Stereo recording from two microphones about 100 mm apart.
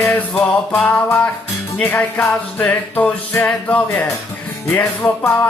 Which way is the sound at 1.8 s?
20° left (ahead or behind).